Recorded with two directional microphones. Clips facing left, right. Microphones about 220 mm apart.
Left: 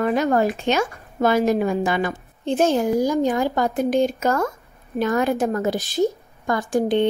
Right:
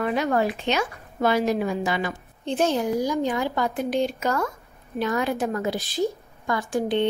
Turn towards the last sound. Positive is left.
turn(degrees=45)  # may be behind; listen again after turning